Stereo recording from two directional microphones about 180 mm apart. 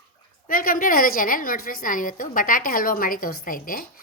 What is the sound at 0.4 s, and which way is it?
A woman's voice, 50° left (ahead or behind).